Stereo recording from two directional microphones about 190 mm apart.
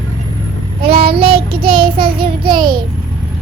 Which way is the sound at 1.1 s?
30° right (ahead or behind).